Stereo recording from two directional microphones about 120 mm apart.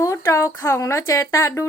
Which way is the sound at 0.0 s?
25° left (ahead or behind).